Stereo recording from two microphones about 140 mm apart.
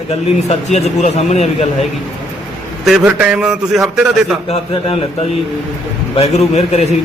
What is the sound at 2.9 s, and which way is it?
A man's voice, 5° right (ahead or behind).